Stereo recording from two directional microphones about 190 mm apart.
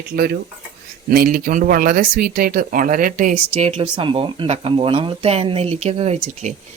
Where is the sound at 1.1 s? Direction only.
50° right (ahead or behind).